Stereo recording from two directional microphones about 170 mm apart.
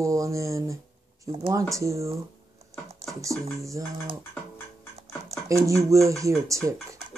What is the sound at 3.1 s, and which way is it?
Music, 20° right (ahead or behind).